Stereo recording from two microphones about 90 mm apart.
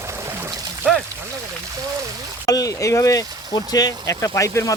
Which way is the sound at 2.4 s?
40° left (ahead or behind).